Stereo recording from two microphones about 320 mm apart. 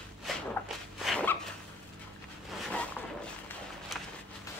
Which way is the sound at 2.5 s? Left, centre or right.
Centre.